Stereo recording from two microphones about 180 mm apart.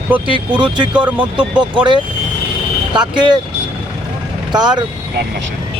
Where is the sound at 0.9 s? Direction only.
5° right (ahead or behind).